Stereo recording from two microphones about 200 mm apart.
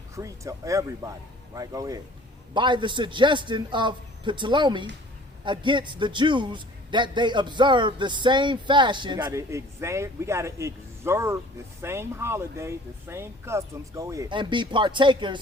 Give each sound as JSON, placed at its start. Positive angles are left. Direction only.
{"t": 0.2, "sound": "a man's voice", "side_deg": -15}